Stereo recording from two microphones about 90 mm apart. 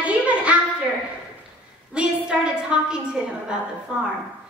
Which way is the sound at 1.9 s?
10° right (ahead or behind).